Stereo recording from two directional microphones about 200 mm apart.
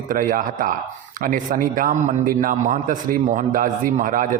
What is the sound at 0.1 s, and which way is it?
A man's voice, 45° right (ahead or behind).